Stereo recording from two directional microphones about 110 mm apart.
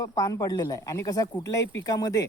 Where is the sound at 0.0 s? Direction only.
30° left (ahead or behind).